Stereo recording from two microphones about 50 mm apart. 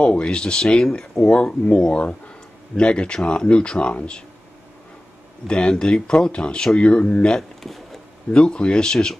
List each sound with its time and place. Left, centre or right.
0.0 s speech: centre
5.5 s speech: centre
7.3 s a sound: centre
8.3 s speech: centre